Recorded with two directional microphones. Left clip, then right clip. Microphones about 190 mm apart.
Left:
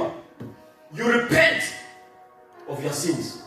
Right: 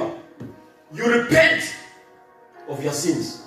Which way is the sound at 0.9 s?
25° right (ahead or behind).